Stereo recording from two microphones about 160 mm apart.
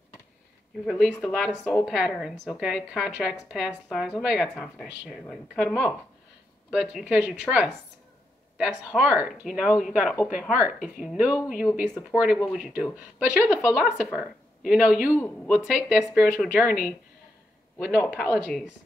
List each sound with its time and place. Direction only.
0.8 s speech: 5° left (ahead or behind)
1.6 s speech: 15° left (ahead or behind)
1.9 s speech: centre (ahead or behind)